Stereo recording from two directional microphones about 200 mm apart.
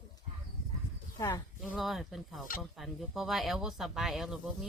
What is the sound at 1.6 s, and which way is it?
Speech, centre (ahead or behind).